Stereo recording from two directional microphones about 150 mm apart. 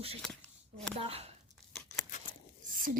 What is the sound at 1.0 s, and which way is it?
Speech, 40° right (ahead or behind).